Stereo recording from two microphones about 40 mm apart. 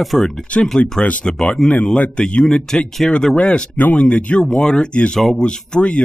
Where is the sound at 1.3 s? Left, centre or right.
Centre.